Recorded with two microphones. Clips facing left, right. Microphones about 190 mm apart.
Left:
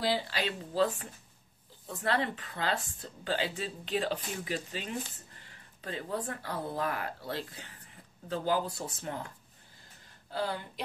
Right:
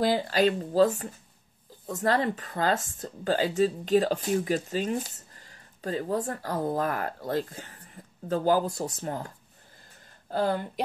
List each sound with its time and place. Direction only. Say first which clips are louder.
0.0 s speech: right 8 dB; 45° right (ahead or behind)
10.3 s speech: right 8 dB; 50° right (ahead or behind)